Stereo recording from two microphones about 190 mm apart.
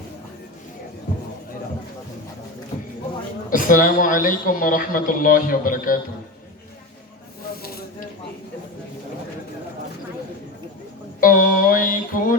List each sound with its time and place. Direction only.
3.5 s speech: 45° left (ahead or behind)
7.6 s snake: 55° left (ahead or behind)
11.2 s a sound: 45° left (ahead or behind)